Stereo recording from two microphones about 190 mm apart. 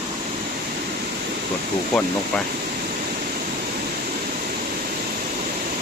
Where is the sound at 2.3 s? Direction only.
5° left (ahead or behind).